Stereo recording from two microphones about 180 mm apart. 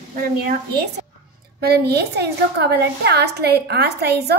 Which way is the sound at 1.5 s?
65° right (ahead or behind).